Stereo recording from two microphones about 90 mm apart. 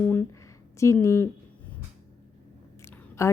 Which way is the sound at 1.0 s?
30° left (ahead or behind).